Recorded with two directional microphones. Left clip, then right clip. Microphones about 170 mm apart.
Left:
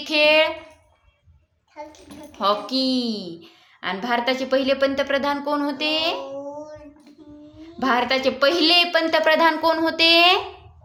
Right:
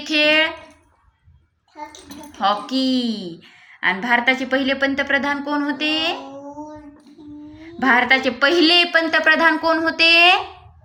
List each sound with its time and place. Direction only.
0.0 s a woman's voice: 25° left (ahead or behind)
2.4 s a woman's voice: 20° left (ahead or behind)
7.5 s a woman's voice: 15° left (ahead or behind)